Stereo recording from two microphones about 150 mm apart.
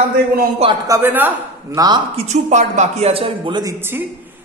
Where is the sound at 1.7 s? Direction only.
30° right (ahead or behind).